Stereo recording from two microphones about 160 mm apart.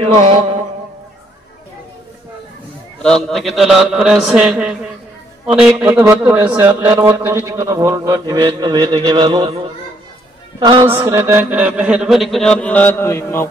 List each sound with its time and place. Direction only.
0.0 s music: 35° right (ahead or behind)
3.0 s music: 5° left (ahead or behind)
5.5 s speech: 5° right (ahead or behind)
6.8 s mantra: 15° right (ahead or behind)
11.0 s music: 15° right (ahead or behind); by 13.5 s 15° left (ahead or behind)